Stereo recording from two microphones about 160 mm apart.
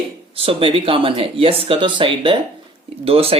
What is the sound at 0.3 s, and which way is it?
Speech, 35° right (ahead or behind).